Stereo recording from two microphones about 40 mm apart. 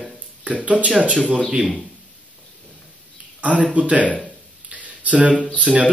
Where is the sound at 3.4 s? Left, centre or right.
Right.